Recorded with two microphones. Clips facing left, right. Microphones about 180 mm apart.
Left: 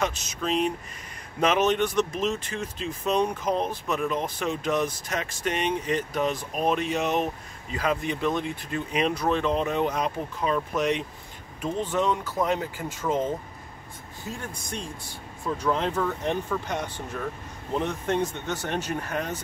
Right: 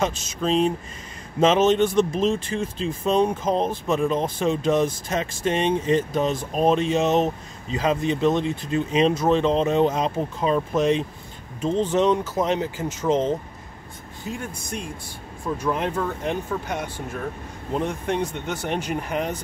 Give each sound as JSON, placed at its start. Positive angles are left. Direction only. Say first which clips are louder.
{"t": 0.0, "sound": "speech", "louder": "right 4 dB", "side_deg": -30}
{"t": 15.6, "sound": "speech", "louder": "even", "side_deg": -15}